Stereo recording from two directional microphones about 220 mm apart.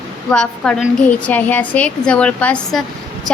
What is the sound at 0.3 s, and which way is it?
A woman's voice, 5° left (ahead or behind).